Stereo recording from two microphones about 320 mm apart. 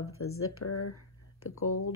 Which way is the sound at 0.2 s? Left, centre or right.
Left.